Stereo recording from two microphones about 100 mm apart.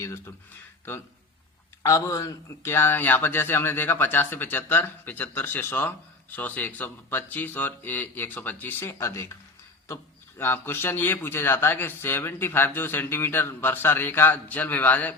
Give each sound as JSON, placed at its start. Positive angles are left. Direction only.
{"t": 1.8, "sound": "speech", "side_deg": 35}